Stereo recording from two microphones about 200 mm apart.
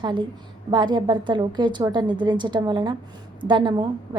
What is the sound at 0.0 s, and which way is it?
A woman's voice, 20° right (ahead or behind).